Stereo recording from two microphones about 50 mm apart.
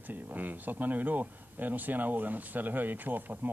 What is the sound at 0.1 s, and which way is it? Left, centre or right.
Speech, right.